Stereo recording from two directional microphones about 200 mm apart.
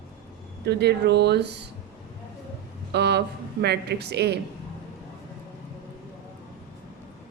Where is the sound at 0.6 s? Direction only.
55° right (ahead or behind).